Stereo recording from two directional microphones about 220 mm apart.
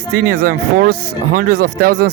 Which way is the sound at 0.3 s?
40° right (ahead or behind).